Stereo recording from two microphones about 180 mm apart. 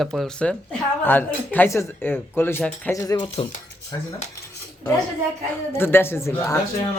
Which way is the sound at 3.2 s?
40° left (ahead or behind).